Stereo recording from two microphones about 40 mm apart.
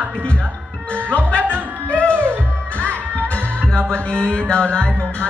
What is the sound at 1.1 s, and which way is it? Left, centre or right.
Music, left.